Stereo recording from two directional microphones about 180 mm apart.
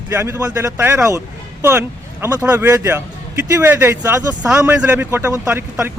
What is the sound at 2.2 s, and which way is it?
Speech, 15° right (ahead or behind).